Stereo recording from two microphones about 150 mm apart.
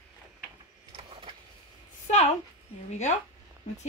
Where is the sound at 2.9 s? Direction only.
50° left (ahead or behind).